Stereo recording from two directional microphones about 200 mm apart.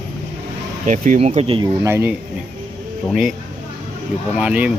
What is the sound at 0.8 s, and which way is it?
Speech, 40° right (ahead or behind).